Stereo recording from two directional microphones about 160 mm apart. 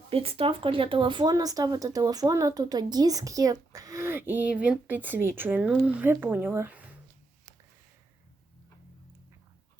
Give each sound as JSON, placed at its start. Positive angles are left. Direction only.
{"t": 0.1, "sound": "speech", "side_deg": -35}